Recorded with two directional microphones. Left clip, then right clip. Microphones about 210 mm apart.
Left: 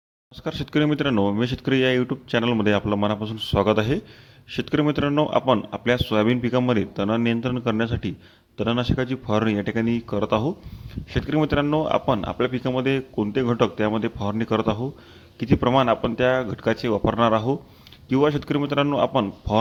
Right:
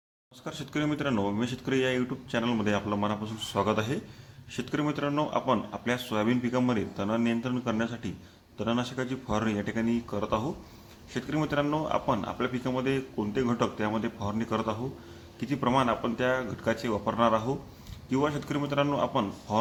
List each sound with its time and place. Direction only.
0.4 s speech: 40° left (ahead or behind)